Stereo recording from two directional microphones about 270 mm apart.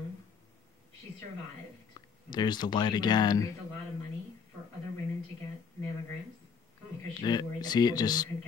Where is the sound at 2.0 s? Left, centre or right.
Centre.